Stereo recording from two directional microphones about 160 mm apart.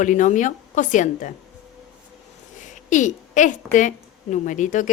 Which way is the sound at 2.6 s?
50° left (ahead or behind).